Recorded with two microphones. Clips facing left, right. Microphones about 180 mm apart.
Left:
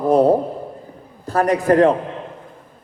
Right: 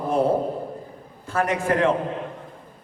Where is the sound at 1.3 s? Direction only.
35° left (ahead or behind).